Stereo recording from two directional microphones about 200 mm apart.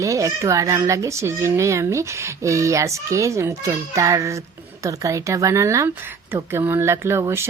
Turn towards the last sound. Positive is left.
turn(degrees=-10)  # may be behind; listen again after turning